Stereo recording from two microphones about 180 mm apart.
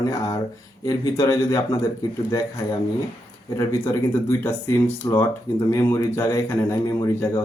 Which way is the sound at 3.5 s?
15° left (ahead or behind).